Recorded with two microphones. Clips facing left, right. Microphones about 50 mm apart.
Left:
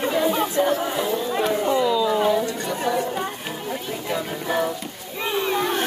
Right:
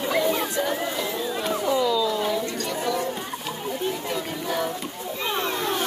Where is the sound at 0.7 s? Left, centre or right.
Left.